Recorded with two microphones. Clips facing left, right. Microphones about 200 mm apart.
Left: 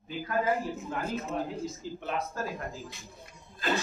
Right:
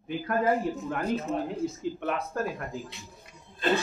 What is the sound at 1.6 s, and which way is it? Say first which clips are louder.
Speech: right 6 dB; 60° right (ahead or behind).